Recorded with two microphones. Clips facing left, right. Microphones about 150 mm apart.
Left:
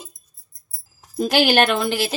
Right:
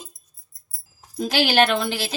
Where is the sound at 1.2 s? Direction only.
50° left (ahead or behind).